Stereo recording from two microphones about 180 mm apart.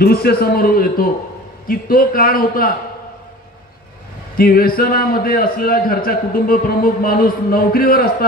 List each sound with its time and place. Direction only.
0.0 s a man's voice: 60° left (ahead or behind)
4.4 s a man's voice: 55° left (ahead or behind)